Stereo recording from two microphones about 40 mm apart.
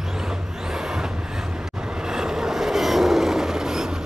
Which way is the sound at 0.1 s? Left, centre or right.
Centre.